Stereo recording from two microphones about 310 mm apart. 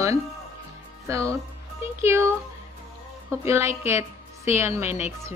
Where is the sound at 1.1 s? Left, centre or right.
Centre.